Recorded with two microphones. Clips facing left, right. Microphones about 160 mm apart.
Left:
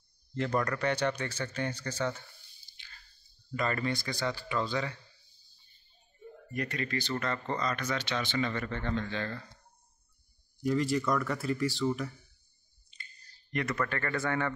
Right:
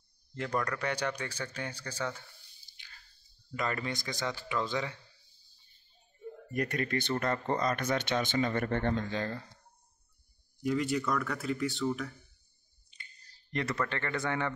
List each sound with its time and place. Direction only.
0.4 s speech: 10° right (ahead or behind)
3.5 s speech: 15° right (ahead or behind)
6.5 s speech: 45° right (ahead or behind)
9.1 s speech: 35° right (ahead or behind)
10.6 s speech: centre (ahead or behind)
12.9 s a sound: 15° right (ahead or behind)
13.5 s speech: 30° right (ahead or behind)